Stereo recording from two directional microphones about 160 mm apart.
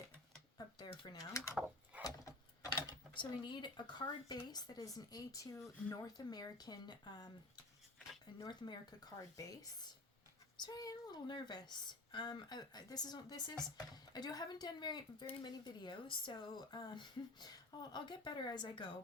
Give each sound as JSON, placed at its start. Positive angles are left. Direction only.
{"t": 0.8, "sound": "speech", "side_deg": 25}
{"t": 1.5, "sound": "drawer open or close", "side_deg": -5}
{"t": 2.7, "sound": "a woman's voice", "side_deg": 25}